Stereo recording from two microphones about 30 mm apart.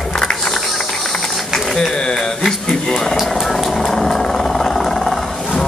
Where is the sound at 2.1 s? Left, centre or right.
Centre.